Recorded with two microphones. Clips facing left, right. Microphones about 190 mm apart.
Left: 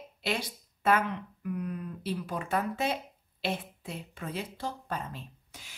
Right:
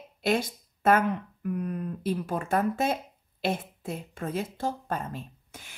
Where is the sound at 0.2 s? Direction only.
45° right (ahead or behind).